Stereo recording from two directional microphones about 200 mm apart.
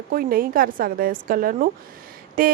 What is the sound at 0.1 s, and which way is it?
Speech, 45° right (ahead or behind).